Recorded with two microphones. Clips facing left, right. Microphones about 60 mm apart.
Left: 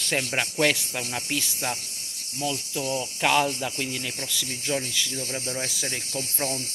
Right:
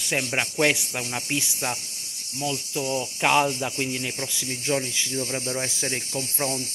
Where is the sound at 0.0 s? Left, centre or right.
Centre.